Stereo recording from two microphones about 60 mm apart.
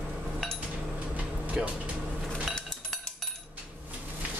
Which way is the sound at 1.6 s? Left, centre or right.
Centre.